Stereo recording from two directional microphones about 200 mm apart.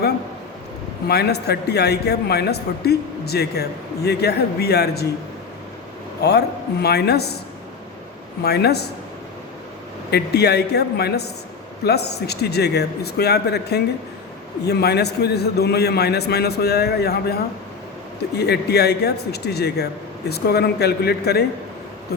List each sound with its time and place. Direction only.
1.0 s a man's voice: 55° left (ahead or behind)
6.2 s a man's voice: 55° left (ahead or behind)
8.4 s a man's voice: 55° left (ahead or behind)
10.1 s a man's voice: 55° left (ahead or behind)